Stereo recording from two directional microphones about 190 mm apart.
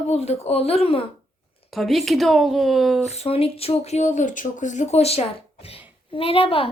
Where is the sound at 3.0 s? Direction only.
35° left (ahead or behind).